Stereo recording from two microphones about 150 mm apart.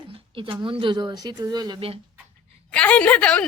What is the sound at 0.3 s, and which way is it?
A woman's voice, 35° right (ahead or behind).